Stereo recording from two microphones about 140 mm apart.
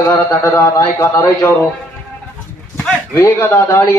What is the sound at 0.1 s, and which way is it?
A man's voice, 30° left (ahead or behind).